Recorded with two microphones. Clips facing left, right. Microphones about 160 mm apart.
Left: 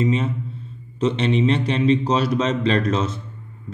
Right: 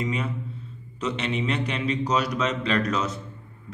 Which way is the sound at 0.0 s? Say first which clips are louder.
Left 7 dB; 25° left (ahead or behind).